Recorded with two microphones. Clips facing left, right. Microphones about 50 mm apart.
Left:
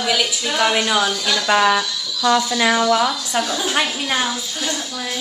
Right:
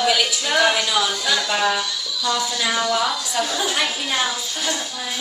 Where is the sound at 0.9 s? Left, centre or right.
Left.